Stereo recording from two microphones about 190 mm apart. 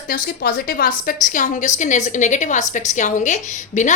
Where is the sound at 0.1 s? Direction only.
50° left (ahead or behind).